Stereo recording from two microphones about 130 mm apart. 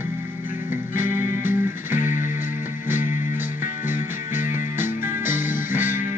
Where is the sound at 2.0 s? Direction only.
80° left.